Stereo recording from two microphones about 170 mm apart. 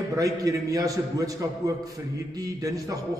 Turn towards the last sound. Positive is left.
turn(degrees=-20)  # may be behind; listen again after turning